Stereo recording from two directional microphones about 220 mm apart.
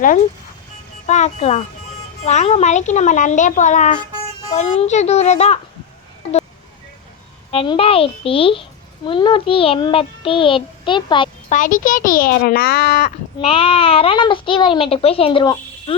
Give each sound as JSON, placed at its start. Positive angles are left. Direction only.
{"t": 1.0, "sound": "a child's voice", "side_deg": 30}
{"t": 7.5, "sound": "speech", "side_deg": 25}
{"t": 11.4, "sound": "a child's voice", "side_deg": 35}
{"t": 13.4, "sound": "speech", "side_deg": 25}